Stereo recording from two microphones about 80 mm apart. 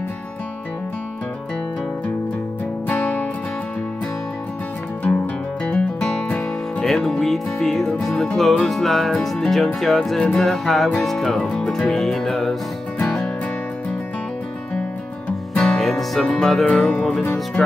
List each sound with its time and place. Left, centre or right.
2.9 s music: centre
5.0 s music: centre
15.2 s music: centre